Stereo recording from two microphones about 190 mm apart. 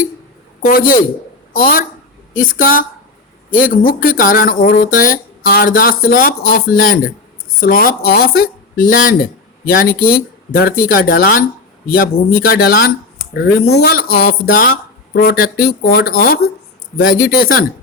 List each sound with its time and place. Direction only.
0.6 s speech: 50° left (ahead or behind)
14.7 s speech: 60° left (ahead or behind)